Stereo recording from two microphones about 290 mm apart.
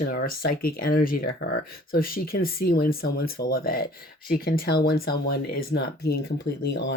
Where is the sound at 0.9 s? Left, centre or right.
Left.